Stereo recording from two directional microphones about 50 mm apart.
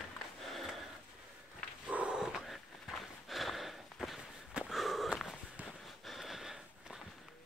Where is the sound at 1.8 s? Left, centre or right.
Right.